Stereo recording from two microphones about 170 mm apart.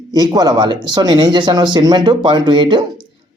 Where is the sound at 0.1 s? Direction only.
25° right (ahead or behind).